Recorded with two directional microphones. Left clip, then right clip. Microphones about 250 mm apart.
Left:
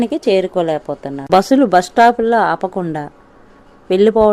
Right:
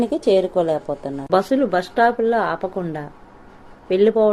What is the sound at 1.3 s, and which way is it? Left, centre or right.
Speech, left.